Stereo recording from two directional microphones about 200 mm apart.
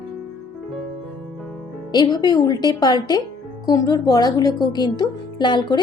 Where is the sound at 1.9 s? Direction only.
20° left (ahead or behind).